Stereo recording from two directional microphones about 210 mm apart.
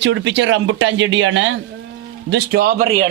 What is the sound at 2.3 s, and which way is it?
Speech, 45° right (ahead or behind).